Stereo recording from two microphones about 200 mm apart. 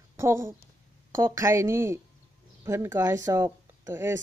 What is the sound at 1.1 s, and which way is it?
A woman's voice, 15° right (ahead or behind).